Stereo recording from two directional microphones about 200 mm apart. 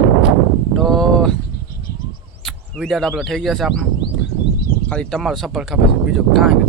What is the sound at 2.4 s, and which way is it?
Speech, centre (ahead or behind).